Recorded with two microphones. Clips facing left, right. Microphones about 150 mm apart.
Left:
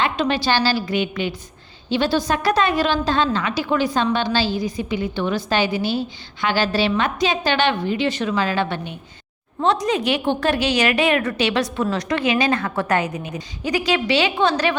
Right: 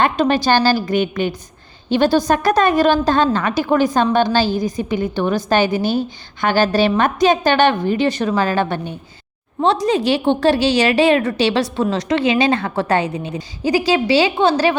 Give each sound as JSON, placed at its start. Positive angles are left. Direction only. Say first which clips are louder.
{"t": 0.0, "sound": "a woman's voice", "louder": "right 5 dB", "side_deg": -45}
{"t": 9.6, "sound": "a woman's voice", "louder": "right 3 dB", "side_deg": -30}